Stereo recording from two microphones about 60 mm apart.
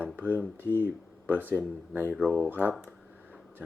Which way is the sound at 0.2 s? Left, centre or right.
Right.